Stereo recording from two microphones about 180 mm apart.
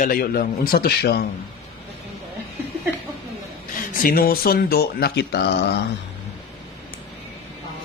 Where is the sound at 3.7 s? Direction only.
50° left (ahead or behind); by 5.4 s 65° left (ahead or behind).